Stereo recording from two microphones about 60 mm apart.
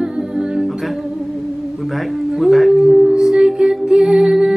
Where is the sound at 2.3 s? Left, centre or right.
Centre.